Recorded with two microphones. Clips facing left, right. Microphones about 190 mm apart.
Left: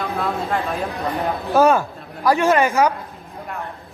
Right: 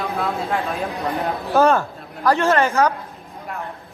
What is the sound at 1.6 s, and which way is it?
A man's voice, 15° left (ahead or behind).